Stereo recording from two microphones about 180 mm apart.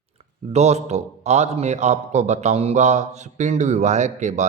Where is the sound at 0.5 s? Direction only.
40° right (ahead or behind).